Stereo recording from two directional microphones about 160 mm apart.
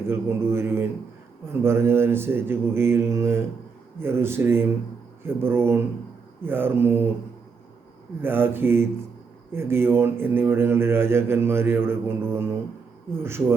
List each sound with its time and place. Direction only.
0.0 s speech: 15° right (ahead or behind)
8.2 s speech: 15° right (ahead or behind)